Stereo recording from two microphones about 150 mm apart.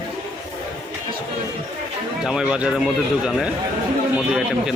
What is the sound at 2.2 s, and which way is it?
Speech, 5° right (ahead or behind).